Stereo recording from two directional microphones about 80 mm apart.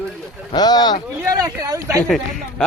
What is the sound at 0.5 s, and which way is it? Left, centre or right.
Speech, left.